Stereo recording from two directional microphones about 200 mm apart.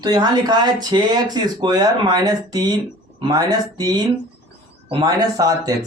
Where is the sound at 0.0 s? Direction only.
20° right (ahead or behind).